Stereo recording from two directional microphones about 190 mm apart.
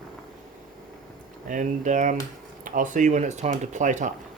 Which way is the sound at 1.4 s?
40° right (ahead or behind).